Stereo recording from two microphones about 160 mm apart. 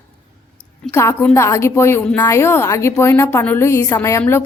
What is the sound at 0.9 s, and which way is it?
A woman's voice, 15° left (ahead or behind).